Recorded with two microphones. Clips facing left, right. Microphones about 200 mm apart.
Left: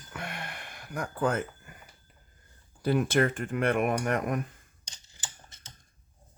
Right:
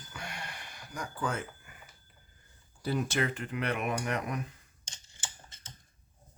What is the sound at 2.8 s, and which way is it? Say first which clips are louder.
Speech: left 6 dB; 60° left (ahead or behind).